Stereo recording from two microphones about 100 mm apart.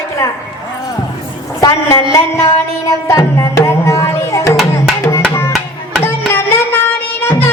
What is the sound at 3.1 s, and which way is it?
Tabla, 30° left (ahead or behind).